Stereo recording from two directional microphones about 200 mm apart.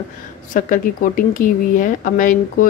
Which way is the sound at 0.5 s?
40° left (ahead or behind).